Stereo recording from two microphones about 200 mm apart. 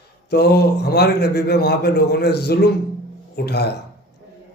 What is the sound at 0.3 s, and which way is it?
A man's voice, 55° left (ahead or behind).